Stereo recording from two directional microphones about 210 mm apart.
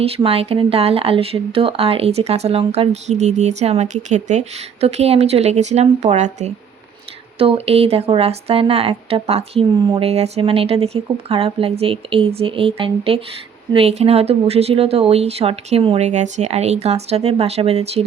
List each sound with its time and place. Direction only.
0.0 s speech: 30° right (ahead or behind)